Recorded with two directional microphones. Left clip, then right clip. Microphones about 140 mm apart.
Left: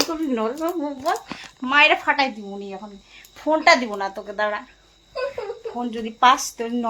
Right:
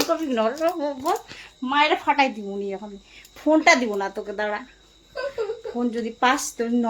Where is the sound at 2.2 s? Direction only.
30° right (ahead or behind).